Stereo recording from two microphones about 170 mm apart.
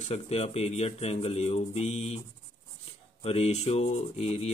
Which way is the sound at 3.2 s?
35° left (ahead or behind).